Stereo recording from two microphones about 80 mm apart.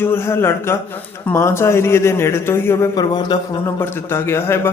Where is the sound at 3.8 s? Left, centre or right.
Left.